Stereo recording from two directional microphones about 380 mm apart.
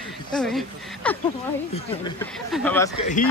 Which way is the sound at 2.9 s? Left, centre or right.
Centre.